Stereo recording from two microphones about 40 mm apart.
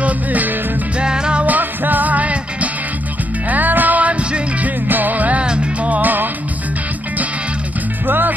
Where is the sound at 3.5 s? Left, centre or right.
Right.